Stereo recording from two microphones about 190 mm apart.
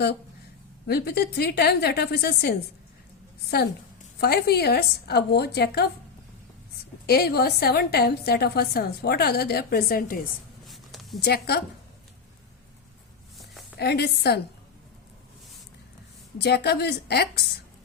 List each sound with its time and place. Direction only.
0.9 s a woman's voice: 55° left (ahead or behind)
4.2 s a woman's voice: 55° left (ahead or behind)
7.1 s a woman's voice: 55° left (ahead or behind)
10.7 s a sound: centre (ahead or behind)
11.2 s a woman's voice: 55° left (ahead or behind)
13.4 s a sound: centre (ahead or behind)
13.7 s a woman's voice: 60° left (ahead or behind)
16.4 s a woman's voice: 60° left (ahead or behind)